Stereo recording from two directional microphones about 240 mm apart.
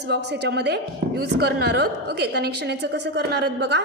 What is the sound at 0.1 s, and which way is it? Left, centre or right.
A woman's voice, right.